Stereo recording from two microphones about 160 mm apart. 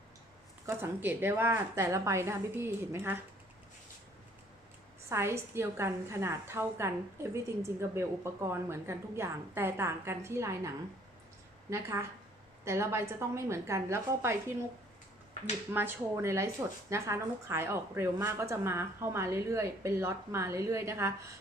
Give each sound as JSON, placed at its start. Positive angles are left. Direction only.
{"t": 0.6, "sound": "a woman's voice", "side_deg": -15}
{"t": 5.0, "sound": "a woman's voice", "side_deg": -15}
{"t": 15.7, "sound": "a woman's voice", "side_deg": -15}